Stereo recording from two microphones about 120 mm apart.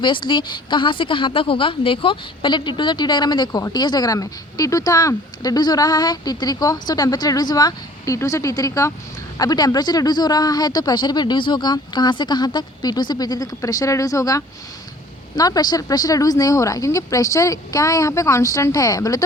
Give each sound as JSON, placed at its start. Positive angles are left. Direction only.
{"t": 0.0, "sound": "a woman's voice", "side_deg": 40}